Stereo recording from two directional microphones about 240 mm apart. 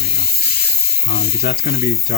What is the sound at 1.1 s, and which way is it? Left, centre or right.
Speech, left.